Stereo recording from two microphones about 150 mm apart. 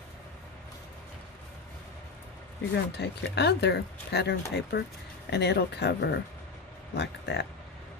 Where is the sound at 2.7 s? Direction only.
90° left.